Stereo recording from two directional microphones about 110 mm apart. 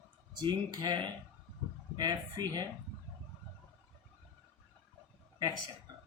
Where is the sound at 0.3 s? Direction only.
40° right (ahead or behind).